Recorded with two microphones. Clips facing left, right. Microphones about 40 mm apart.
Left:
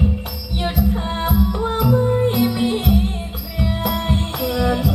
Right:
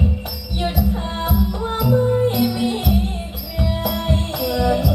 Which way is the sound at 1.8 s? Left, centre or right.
Centre.